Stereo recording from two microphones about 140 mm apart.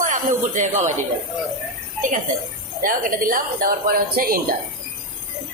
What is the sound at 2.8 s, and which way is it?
A woman's voice, 85° right.